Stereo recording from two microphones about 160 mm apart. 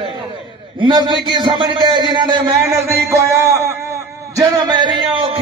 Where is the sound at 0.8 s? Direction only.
30° right (ahead or behind).